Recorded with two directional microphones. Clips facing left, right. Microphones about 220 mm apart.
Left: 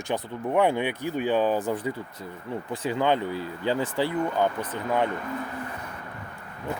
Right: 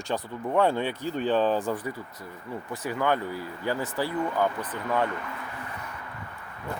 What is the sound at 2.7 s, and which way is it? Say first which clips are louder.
Speech: left 2 dB; 25° left (ahead or behind).